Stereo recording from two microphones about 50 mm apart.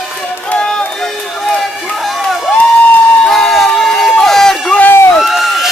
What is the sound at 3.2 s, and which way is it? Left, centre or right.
Crowd, centre.